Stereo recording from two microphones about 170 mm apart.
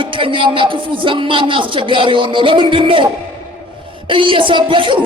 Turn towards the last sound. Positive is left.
turn(degrees=-30)  # may be behind; listen again after turning